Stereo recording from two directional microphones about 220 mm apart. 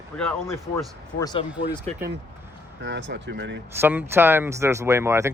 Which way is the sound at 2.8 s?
50° right (ahead or behind).